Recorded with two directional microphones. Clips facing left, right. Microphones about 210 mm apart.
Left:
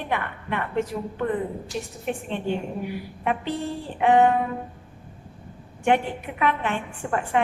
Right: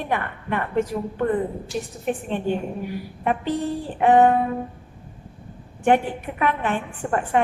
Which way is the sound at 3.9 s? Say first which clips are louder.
Right 2 dB; 45° right (ahead or behind).